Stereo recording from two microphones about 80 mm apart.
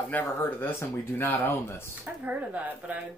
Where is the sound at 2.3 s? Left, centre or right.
Centre.